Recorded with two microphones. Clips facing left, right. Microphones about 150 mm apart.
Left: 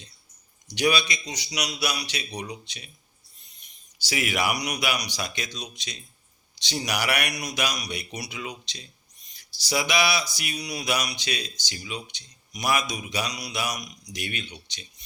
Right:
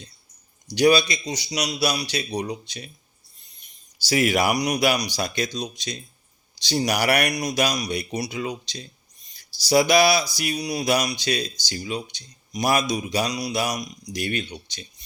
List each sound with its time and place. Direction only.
0.7 s speech: 35° right (ahead or behind)
4.0 s speech: 35° right (ahead or behind)